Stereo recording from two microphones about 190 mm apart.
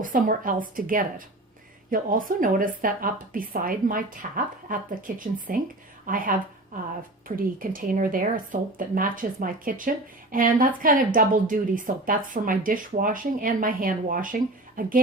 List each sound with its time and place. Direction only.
0.0 s a woman's voice: 45° right (ahead or behind)